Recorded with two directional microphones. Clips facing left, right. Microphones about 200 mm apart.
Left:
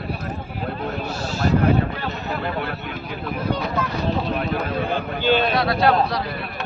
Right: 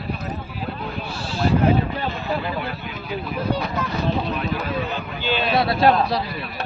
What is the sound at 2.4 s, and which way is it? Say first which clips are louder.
Speech: left 1 dB; 55° left (ahead or behind).